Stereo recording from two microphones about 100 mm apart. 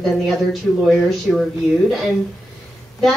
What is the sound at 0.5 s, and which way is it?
Speech, centre (ahead or behind).